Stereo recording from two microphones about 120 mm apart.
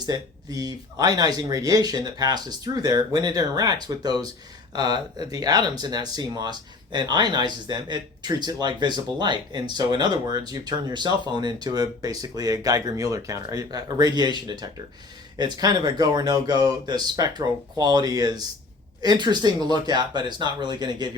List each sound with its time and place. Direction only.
0.0 s speech: 30° right (ahead or behind)